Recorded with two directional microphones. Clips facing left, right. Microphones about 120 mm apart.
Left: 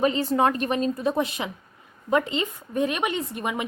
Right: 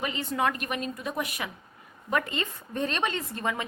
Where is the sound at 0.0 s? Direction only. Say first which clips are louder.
Left 7 dB; 35° left (ahead or behind).